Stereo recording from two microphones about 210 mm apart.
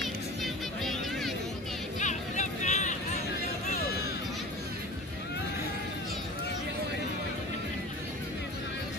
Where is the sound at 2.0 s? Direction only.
35° left (ahead or behind).